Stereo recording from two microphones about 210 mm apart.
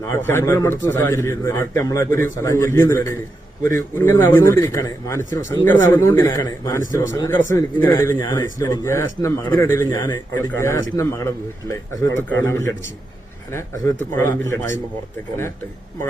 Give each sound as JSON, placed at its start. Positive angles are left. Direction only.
{"t": 0.1, "sound": "speech", "side_deg": 10}